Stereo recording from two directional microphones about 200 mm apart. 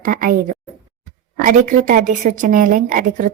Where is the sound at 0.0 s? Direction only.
45° right (ahead or behind).